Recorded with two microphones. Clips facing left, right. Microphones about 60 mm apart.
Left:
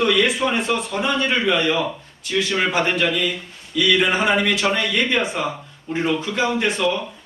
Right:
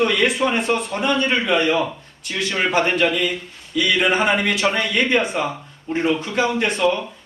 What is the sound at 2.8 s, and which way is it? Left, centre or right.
Speech, centre.